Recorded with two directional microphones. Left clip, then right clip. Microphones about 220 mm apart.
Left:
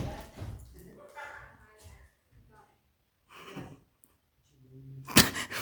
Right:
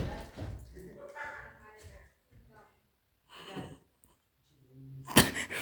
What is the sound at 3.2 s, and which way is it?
Gasp, 30° left (ahead or behind).